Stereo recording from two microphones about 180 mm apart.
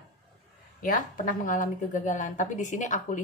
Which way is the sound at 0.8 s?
50° left (ahead or behind).